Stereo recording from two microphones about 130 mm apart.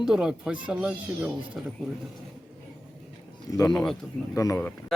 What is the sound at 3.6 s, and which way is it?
Speech, 5° left (ahead or behind).